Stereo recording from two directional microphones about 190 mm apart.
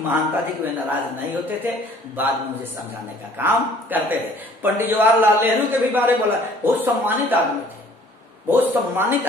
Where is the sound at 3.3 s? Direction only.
10° right (ahead or behind).